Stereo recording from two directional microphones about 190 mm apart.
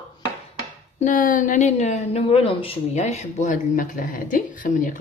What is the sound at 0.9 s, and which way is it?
Speech, 40° left (ahead or behind).